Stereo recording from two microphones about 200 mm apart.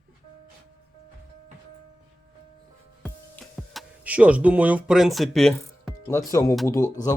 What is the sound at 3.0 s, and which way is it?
Music, 5° left (ahead or behind).